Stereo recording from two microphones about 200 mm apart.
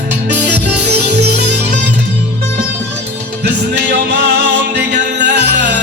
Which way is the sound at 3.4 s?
60° right (ahead or behind).